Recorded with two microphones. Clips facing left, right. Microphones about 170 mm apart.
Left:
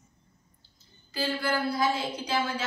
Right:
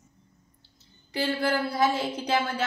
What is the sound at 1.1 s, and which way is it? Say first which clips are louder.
Speech: right 3 dB; 70° right (ahead or behind).